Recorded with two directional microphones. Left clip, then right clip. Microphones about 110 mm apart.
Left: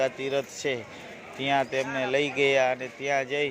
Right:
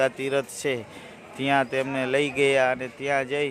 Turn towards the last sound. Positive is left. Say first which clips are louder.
# right 2 dB
turn(degrees=-45)  # may be behind; listen again after turning